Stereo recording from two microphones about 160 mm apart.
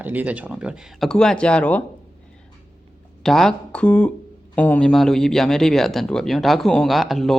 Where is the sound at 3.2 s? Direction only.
Centre (ahead or behind).